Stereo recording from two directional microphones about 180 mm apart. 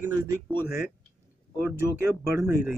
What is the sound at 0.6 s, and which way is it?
Speech, 15° right (ahead or behind).